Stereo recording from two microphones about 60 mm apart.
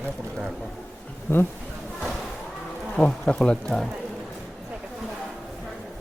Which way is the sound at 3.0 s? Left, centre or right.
Centre.